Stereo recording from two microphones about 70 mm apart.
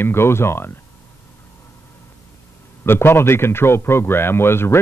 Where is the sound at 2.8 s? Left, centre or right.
Left.